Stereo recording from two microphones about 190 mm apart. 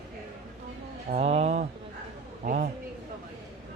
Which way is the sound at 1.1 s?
35° right (ahead or behind).